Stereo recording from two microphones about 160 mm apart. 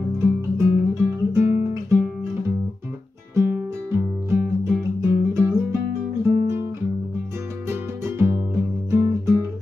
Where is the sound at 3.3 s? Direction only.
15° right (ahead or behind).